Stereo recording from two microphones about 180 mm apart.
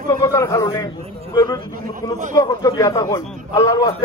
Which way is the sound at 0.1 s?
20° left (ahead or behind).